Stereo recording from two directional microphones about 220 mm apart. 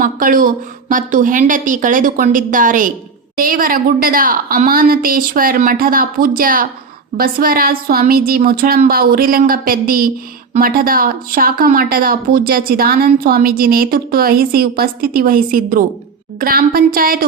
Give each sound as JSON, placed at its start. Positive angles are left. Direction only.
{"t": 0.0, "sound": "speech", "side_deg": -40}